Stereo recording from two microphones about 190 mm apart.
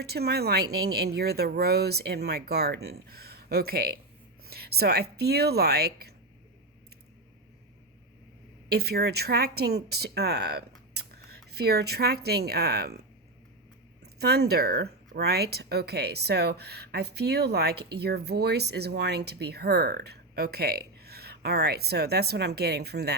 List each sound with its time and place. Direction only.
0.0 s speech: 55° right (ahead or behind)
4.4 s a sound: 55° right (ahead or behind)
5.1 s speech: 55° right (ahead or behind)
8.7 s speech: 55° right (ahead or behind)
10.9 s whispering: 55° right (ahead or behind)
11.5 s speech: 55° right (ahead or behind)
14.0 s speech: 60° right (ahead or behind)